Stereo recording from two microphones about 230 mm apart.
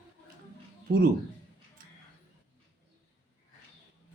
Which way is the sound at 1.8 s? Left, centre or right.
Right.